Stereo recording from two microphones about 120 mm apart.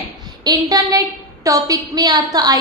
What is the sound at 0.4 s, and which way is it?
A woman's voice, 30° right (ahead or behind).